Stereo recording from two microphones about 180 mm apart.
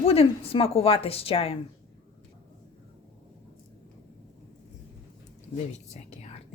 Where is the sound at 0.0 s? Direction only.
35° left (ahead or behind).